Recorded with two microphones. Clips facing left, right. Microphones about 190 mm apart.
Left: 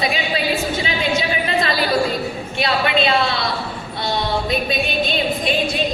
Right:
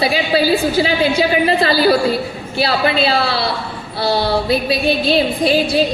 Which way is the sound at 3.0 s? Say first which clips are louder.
Right 2 dB; 35° right (ahead or behind).